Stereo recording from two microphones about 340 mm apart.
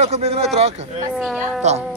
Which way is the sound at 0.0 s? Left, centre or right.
Centre.